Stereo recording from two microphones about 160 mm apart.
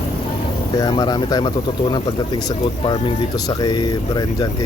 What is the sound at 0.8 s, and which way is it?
Speech, 25° left (ahead or behind).